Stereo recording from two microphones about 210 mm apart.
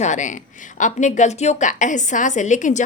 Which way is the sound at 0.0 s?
35° left (ahead or behind).